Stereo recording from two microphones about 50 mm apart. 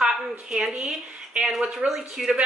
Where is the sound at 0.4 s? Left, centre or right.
Right.